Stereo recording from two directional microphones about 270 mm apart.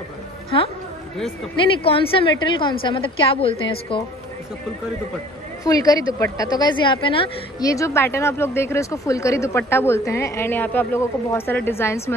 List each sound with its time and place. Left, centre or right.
1.8 s a woman's voice: centre
5.6 s a woman's voice: centre